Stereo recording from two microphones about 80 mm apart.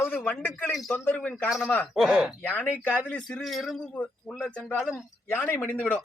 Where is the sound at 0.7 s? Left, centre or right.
Centre.